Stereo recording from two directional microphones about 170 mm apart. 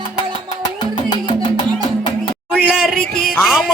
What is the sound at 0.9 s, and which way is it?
Music, 25° left (ahead or behind).